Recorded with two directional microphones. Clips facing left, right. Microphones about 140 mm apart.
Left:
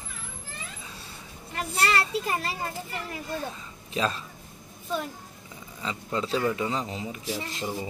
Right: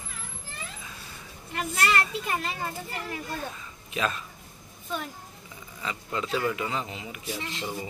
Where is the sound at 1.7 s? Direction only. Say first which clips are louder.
Left 1 dB; 30° left (ahead or behind).